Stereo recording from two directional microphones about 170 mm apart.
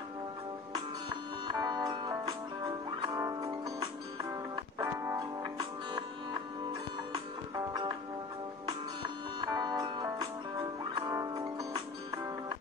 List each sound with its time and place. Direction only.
1.5 s music: 25° right (ahead or behind)
7.1 s music: 25° right (ahead or behind)
9.4 s music: 25° right (ahead or behind)